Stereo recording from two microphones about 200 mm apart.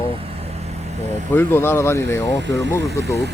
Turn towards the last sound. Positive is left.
turn(degrees=15)  # may be behind; listen again after turning